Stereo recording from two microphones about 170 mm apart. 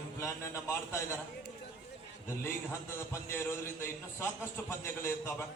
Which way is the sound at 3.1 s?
15° left (ahead or behind).